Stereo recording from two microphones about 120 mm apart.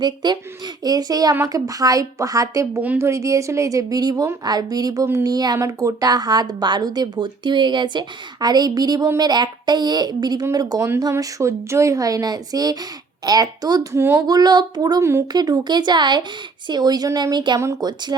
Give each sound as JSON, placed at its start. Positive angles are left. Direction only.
{"t": 0.0, "sound": "speech", "side_deg": -35}
{"t": 2.8, "sound": "a woman's voice", "side_deg": -15}
{"t": 3.1, "sound": "speech", "side_deg": -25}